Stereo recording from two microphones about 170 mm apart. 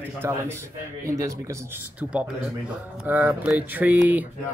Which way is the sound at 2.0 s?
10° right (ahead or behind).